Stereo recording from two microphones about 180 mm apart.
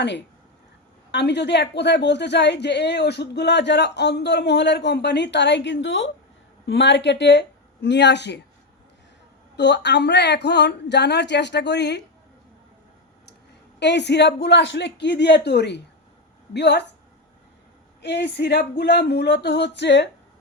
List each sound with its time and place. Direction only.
1.1 s a woman's voice: 70° left (ahead or behind)
6.7 s a woman's voice: 75° left (ahead or behind)
9.6 s a woman's voice: 75° left (ahead or behind)
13.7 s a woman's voice: 70° left (ahead or behind)
18.0 s a woman's voice: 70° left (ahead or behind)